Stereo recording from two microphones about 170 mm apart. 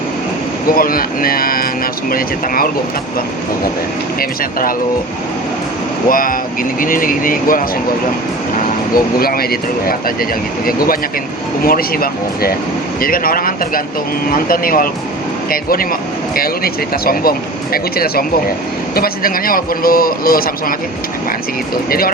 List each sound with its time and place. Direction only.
0.7 s speech: 55° left (ahead or behind)
6.1 s speech: 55° left (ahead or behind)
9.2 s speech: 60° left (ahead or behind)
11.6 s speech: 60° left (ahead or behind)
21.8 s speech: 60° left (ahead or behind)